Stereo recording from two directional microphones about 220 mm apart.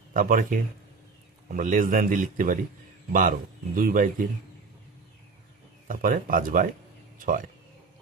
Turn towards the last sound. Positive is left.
turn(degrees=-40)  # may be behind; listen again after turning